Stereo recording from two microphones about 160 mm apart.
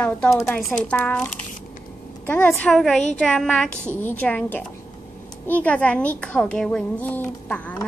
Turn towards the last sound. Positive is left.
turn(degrees=10)  # may be behind; listen again after turning